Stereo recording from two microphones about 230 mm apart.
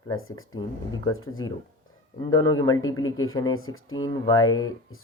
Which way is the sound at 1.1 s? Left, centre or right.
Left.